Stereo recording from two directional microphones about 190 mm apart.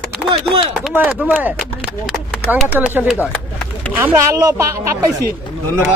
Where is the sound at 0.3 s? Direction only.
30° right (ahead or behind).